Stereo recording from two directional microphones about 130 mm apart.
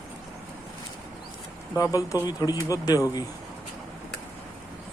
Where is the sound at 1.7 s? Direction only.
25° left (ahead or behind).